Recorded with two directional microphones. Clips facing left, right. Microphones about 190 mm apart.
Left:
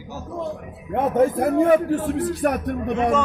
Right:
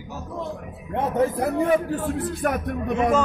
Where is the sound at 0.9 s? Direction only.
50° left (ahead or behind).